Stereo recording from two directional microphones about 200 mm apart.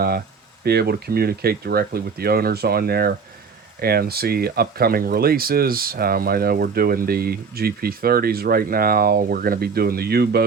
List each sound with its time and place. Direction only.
0.6 s speech: 55° right (ahead or behind)